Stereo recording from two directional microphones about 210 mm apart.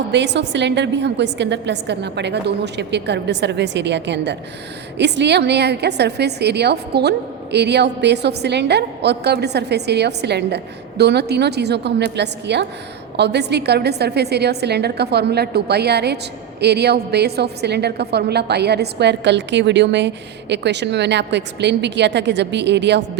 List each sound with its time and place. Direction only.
0.1 s a woman's voice: 55° right (ahead or behind)